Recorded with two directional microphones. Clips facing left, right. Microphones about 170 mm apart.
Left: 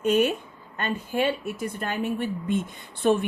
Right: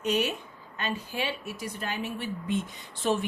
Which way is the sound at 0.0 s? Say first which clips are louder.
Left 6 dB; 50° left (ahead or behind).